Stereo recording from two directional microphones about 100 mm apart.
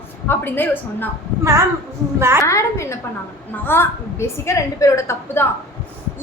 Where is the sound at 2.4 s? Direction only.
30° left (ahead or behind).